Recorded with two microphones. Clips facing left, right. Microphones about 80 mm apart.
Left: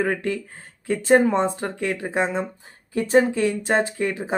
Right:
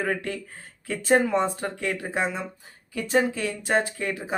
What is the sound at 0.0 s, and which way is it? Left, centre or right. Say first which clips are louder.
Speech: left 4 dB; centre.